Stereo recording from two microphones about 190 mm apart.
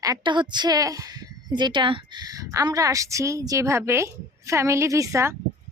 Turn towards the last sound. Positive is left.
turn(degrees=-15)  # may be behind; listen again after turning